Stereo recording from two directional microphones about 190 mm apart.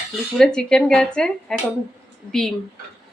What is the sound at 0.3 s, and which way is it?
A woman's voice, 5° left (ahead or behind).